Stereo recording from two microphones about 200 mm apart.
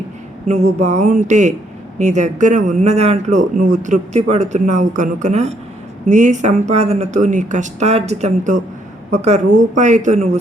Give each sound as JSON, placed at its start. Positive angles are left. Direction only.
{"t": 0.4, "sound": "a man's voice", "side_deg": -35}